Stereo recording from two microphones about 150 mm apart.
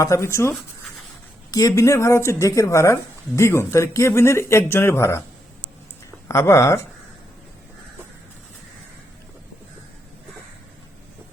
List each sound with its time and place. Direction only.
0.0 s speech: 20° left (ahead or behind)
6.2 s speech: 20° left (ahead or behind)